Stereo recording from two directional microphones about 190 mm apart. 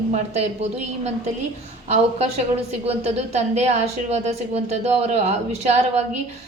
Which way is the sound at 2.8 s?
35° right (ahead or behind).